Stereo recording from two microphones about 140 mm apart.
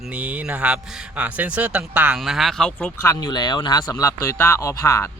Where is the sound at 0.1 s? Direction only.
10° right (ahead or behind); by 2.9 s 5° left (ahead or behind).